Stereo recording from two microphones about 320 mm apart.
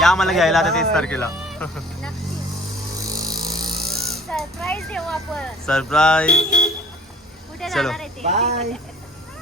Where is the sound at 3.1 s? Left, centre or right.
Centre.